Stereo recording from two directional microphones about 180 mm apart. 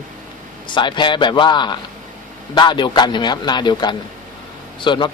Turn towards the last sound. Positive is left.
turn(degrees=25)  # may be behind; listen again after turning